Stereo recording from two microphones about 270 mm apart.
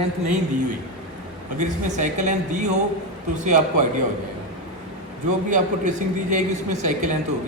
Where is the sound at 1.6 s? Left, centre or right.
Right.